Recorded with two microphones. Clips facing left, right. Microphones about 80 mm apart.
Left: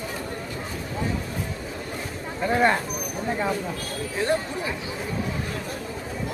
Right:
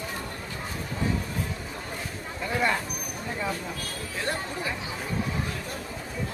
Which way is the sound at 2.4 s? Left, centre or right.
Left.